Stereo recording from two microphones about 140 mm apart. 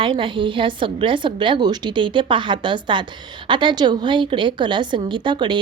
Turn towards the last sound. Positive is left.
turn(degrees=-35)  # may be behind; listen again after turning